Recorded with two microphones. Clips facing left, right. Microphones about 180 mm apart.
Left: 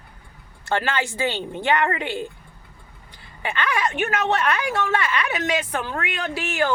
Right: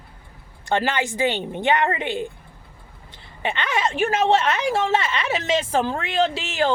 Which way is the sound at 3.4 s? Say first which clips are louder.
Right 1 dB; 20° right (ahead or behind).